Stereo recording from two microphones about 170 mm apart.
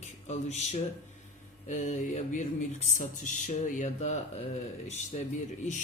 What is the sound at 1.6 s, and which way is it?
Speech, 45° left (ahead or behind).